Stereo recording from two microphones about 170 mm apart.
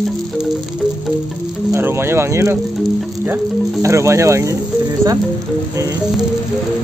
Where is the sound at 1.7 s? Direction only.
15° right (ahead or behind).